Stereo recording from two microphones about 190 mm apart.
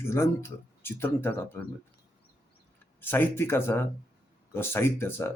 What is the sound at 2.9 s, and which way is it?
Speech, 10° left (ahead or behind).